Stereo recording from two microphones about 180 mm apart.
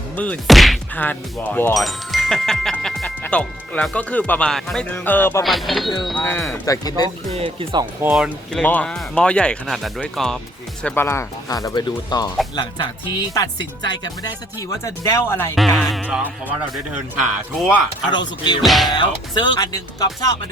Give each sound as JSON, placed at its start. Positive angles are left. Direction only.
{"t": 0.2, "sound": "speech", "side_deg": 5}
{"t": 5.4, "sound": "speech", "side_deg": 0}
{"t": 6.5, "sound": "speech", "side_deg": 20}
{"t": 7.3, "sound": "speech", "side_deg": -30}
{"t": 8.1, "sound": "speech", "side_deg": 0}
{"t": 15.5, "sound": "speech", "side_deg": 0}
{"t": 17.6, "sound": "speech", "side_deg": -5}
{"t": 18.1, "sound": "speech", "side_deg": 25}
{"t": 18.6, "sound": "speech", "side_deg": 0}
{"t": 18.9, "sound": "speech", "side_deg": 25}